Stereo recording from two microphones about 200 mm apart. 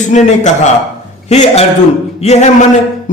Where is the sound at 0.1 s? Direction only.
35° left (ahead or behind).